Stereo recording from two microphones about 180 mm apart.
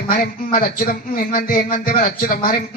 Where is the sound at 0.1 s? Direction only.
55° left (ahead or behind).